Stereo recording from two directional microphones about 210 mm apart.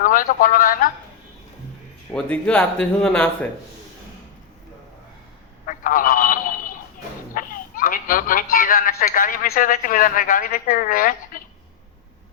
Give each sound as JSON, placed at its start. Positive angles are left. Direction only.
{"t": 0.0, "sound": "speech", "side_deg": 40}
{"t": 2.1, "sound": "speech", "side_deg": 5}
{"t": 5.6, "sound": "telephone", "side_deg": 40}
{"t": 7.3, "sound": "speech", "side_deg": 40}